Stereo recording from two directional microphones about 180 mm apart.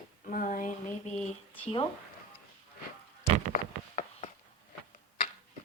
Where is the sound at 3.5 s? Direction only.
40° left (ahead or behind).